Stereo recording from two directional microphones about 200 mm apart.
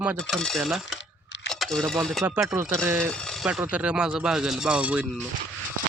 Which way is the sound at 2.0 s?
Centre (ahead or behind).